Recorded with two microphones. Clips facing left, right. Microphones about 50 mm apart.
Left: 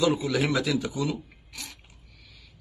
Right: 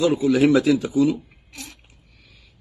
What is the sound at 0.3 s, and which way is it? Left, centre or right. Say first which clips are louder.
Speech: right 9 dB; right.